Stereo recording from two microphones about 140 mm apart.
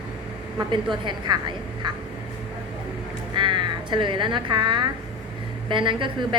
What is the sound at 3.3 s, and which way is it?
Speech, 35° right (ahead or behind).